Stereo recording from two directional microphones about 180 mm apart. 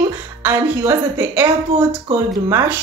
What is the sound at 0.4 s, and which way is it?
A woman's voice, 15° right (ahead or behind).